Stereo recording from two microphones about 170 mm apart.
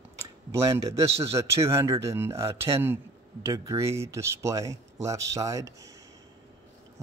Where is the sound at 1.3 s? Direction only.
15° right (ahead or behind).